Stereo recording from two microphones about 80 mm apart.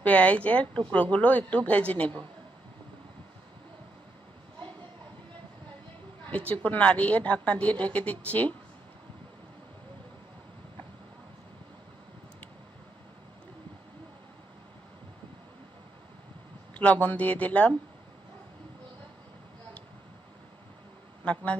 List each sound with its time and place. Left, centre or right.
0.0 s a woman's voice: centre
6.2 s a woman's voice: centre
16.7 s speech: centre